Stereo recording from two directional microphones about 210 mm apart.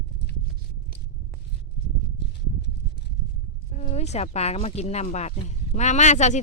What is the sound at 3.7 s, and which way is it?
Speech, 30° left (ahead or behind).